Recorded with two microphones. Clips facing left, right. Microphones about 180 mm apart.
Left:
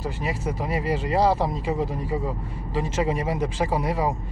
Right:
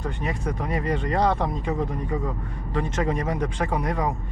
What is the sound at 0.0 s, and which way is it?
Speech, 5° left (ahead or behind).